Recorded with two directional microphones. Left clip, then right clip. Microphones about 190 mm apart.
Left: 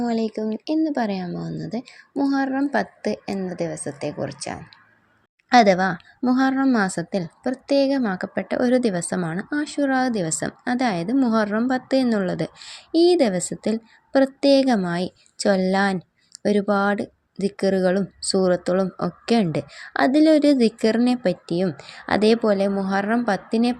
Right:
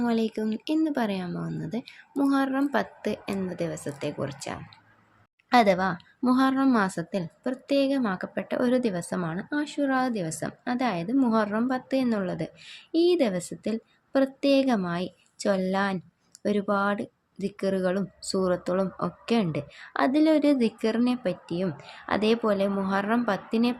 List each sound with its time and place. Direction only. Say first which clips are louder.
0.0 s a woman's voice: left 3 dB; 10° left (ahead or behind)